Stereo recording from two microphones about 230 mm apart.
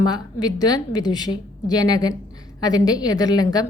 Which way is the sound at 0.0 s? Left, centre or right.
Centre.